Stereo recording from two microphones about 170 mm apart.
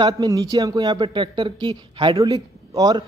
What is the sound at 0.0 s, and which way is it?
Speech, 25° right (ahead or behind).